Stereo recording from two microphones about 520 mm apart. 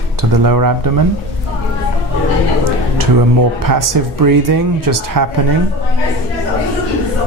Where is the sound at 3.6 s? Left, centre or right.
Right.